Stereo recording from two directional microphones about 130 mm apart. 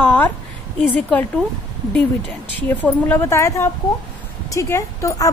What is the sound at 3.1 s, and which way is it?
A woman's voice, 20° left (ahead or behind).